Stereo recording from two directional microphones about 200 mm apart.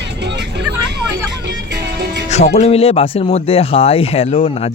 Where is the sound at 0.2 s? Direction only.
60° right (ahead or behind).